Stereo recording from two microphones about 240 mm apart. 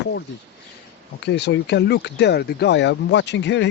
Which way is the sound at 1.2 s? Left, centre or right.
Left.